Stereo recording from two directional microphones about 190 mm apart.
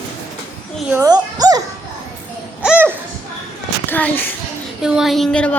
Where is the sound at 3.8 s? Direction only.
10° left (ahead or behind).